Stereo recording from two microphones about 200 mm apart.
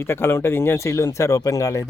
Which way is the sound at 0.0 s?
10° left (ahead or behind).